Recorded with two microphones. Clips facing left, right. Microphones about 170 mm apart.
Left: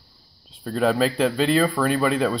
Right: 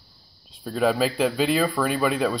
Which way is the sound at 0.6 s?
5° right (ahead or behind).